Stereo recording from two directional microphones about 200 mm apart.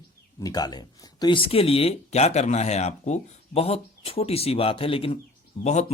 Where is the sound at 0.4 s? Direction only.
20° left (ahead or behind).